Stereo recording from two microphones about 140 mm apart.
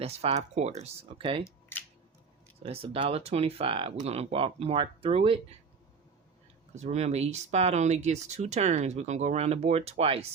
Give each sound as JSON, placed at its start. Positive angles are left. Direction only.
{"t": 0.0, "sound": "speech", "side_deg": -50}
{"t": 2.6, "sound": "speech", "side_deg": -45}
{"t": 6.7, "sound": "speech", "side_deg": -55}